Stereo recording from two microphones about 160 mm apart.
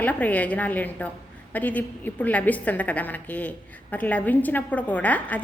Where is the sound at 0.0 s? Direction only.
10° left (ahead or behind).